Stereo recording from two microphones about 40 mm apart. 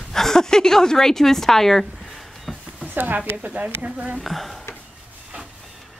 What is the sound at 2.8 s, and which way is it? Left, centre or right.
Speech, right.